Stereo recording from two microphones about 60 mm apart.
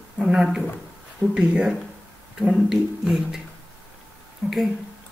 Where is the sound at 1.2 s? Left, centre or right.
Centre.